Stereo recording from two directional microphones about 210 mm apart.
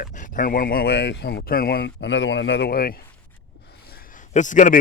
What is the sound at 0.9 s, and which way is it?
Speech, 60° left (ahead or behind).